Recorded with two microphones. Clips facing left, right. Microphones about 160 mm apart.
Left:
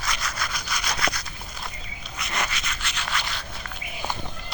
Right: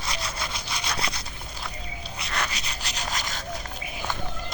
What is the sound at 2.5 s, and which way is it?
Rub, 35° right (ahead or behind).